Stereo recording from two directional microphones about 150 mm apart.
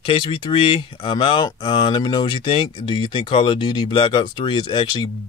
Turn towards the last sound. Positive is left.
turn(degrees=30)  # may be behind; listen again after turning